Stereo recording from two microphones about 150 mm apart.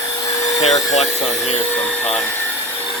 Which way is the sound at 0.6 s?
45° left (ahead or behind).